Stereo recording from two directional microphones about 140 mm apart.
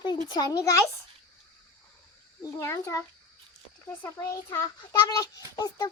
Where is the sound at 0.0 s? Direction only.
30° left (ahead or behind).